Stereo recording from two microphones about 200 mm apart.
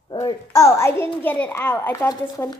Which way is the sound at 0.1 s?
20° left (ahead or behind).